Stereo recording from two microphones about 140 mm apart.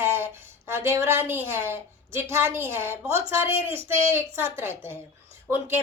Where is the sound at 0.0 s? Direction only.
15° right (ahead or behind).